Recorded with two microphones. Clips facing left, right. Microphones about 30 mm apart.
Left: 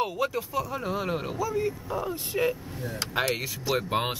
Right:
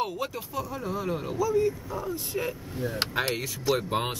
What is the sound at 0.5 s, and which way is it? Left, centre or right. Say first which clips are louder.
Speech: left 3 dB; centre.